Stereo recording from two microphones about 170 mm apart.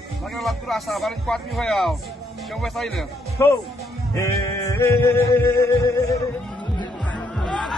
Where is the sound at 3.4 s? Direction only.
15° left (ahead or behind).